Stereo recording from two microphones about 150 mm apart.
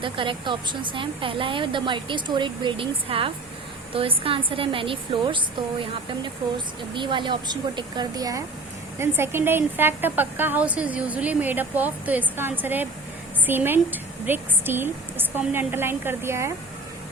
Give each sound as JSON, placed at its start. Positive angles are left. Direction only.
{"t": 0.0, "sound": "a woman's voice", "side_deg": -35}
{"t": 6.9, "sound": "a woman's voice", "side_deg": -30}